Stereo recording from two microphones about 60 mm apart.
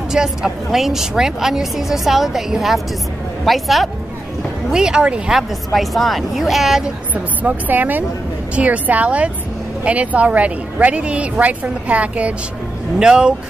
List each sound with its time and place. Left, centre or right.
0.1 s a woman's voice: centre
4.6 s speech: centre
5.7 s a woman's voice: centre
7.4 s a woman's voice: right; by 13.3 s centre